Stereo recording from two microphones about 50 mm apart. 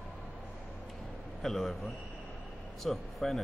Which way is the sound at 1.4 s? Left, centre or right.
Centre.